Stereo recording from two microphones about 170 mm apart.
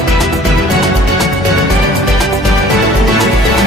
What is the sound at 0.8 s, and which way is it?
Music, centre (ahead or behind).